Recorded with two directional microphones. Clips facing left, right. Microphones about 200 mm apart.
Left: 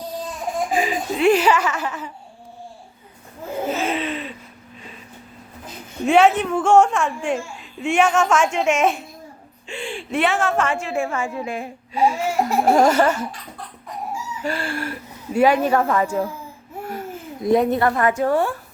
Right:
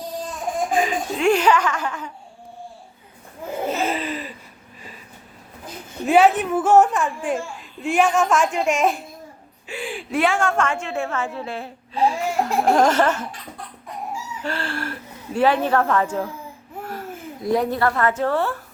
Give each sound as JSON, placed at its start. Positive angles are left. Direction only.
{"t": 0.7, "sound": "a child's voice", "side_deg": 5}
{"t": 3.8, "sound": "a sound", "side_deg": 0}
{"t": 6.1, "sound": "a woman's voice", "side_deg": -5}
{"t": 14.4, "sound": "a woman's voice", "side_deg": 10}
{"t": 17.4, "sound": "a woman's voice", "side_deg": 20}